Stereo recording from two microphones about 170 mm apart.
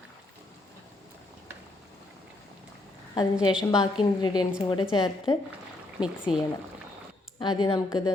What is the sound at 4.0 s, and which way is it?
A woman's voice, 25° left (ahead or behind).